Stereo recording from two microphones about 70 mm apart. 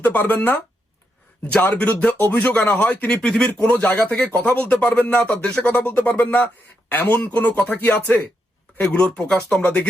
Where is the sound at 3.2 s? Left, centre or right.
Centre.